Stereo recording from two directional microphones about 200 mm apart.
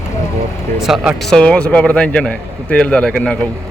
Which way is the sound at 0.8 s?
Centre (ahead or behind).